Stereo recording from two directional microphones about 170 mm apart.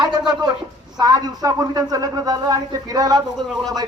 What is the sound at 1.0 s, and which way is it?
A man's voice, 25° right (ahead or behind).